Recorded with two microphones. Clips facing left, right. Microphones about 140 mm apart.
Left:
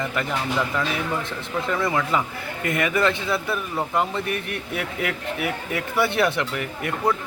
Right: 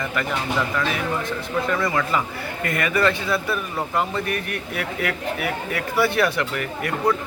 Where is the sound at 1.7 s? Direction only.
20° left (ahead or behind).